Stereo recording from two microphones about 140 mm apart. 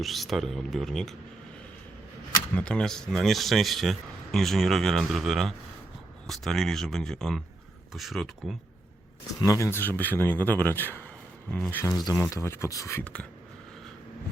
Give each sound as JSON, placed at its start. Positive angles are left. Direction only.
{"t": 0.0, "sound": "a man's voice", "side_deg": 0}
{"t": 2.6, "sound": "a man's voice", "side_deg": 5}
{"t": 9.4, "sound": "speech", "side_deg": 20}
{"t": 11.9, "sound": "speech", "side_deg": 30}